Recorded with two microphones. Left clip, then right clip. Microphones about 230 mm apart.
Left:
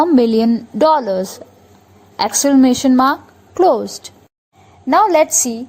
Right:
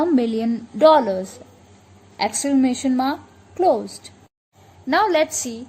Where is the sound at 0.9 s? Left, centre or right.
Left.